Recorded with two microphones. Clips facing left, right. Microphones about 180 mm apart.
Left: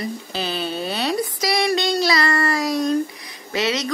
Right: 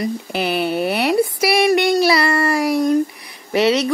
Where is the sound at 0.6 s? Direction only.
70° right (ahead or behind).